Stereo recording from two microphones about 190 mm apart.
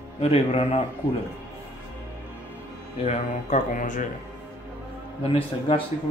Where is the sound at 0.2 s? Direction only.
35° left (ahead or behind).